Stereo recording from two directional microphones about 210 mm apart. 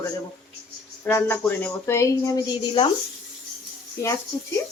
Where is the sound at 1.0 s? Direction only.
10° left (ahead or behind).